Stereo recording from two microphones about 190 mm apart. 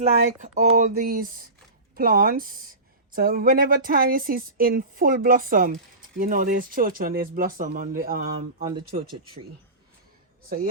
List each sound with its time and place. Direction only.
0.0 s speech: 35° right (ahead or behind)